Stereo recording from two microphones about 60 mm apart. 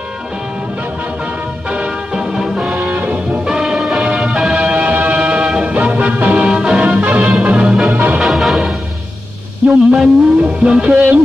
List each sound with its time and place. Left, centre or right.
1.7 s music: centre
2.7 s music: right
3.4 s music: centre
7.9 s music: right
8.2 s music: centre
9.9 s music: centre